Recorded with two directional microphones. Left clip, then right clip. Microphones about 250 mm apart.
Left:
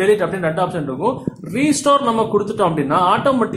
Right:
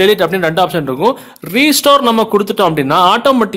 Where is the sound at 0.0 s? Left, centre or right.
Right.